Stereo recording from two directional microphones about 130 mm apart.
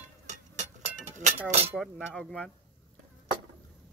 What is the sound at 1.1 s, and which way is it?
Speech, 60° right (ahead or behind).